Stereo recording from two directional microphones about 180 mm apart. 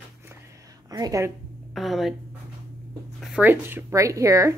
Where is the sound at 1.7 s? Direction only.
Centre (ahead or behind).